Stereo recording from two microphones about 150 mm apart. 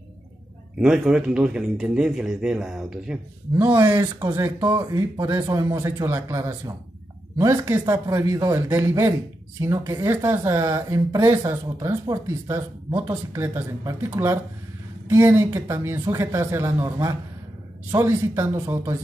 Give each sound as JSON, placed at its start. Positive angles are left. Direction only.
{"t": 0.7, "sound": "speech", "side_deg": -5}
{"t": 3.5, "sound": "speech", "side_deg": -15}